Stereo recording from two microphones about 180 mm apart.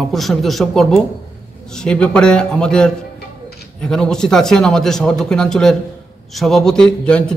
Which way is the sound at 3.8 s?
5° left (ahead or behind).